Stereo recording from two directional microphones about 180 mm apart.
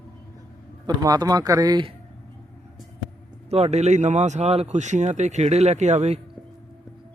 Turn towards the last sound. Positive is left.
turn(degrees=-40)  # may be behind; listen again after turning